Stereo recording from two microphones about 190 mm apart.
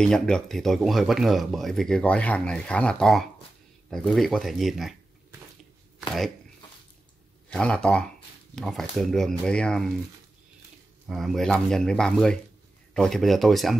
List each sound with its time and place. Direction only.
0.0 s speech: 5° left (ahead or behind)
7.4 s speech: 5° left (ahead or behind)
11.1 s speech: centre (ahead or behind)